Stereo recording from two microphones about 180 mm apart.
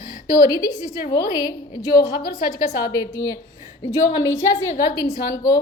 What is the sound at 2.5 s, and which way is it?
A woman's voice, 20° left (ahead or behind).